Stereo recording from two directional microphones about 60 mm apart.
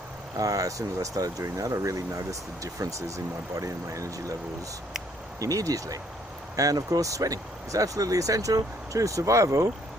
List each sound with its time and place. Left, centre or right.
0.3 s speech: right
5.4 s speech: right